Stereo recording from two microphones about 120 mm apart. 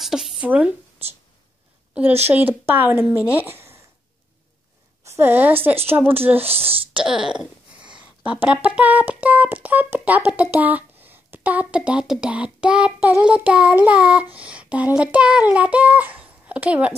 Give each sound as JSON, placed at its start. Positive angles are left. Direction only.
{"t": 0.0, "sound": "speech", "side_deg": 0}
{"t": 2.2, "sound": "child singing", "side_deg": -15}
{"t": 5.0, "sound": "a woman's voice", "side_deg": -20}
{"t": 6.4, "sound": "speech", "side_deg": -55}
{"t": 7.1, "sound": "speech", "side_deg": -5}
{"t": 13.2, "sound": "child singing", "side_deg": -10}